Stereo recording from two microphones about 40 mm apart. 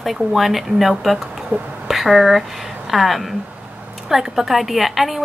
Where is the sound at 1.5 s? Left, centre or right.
Right.